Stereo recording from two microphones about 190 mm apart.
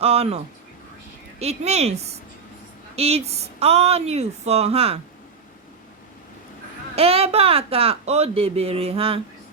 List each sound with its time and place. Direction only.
0.0 s speech: 30° right (ahead or behind)
6.9 s speech: 30° right (ahead or behind)